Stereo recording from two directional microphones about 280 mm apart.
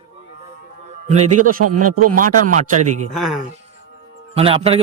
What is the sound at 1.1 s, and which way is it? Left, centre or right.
Speech, right.